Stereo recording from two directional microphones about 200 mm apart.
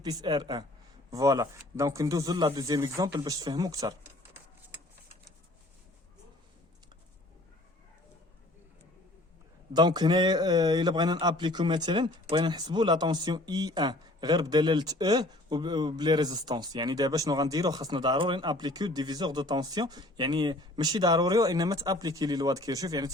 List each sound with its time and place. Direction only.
0.0 s a man's voice: 20° right (ahead or behind)
9.7 s a man's voice: 20° right (ahead or behind)